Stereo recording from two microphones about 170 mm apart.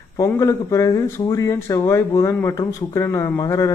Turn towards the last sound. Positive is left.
turn(degrees=20)  # may be behind; listen again after turning